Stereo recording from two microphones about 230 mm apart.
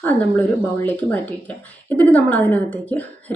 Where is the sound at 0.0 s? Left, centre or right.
Centre.